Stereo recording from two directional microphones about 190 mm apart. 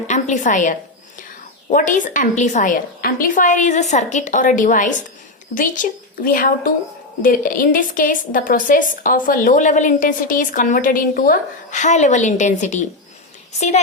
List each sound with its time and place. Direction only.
0.1 s a woman's voice: 40° left (ahead or behind)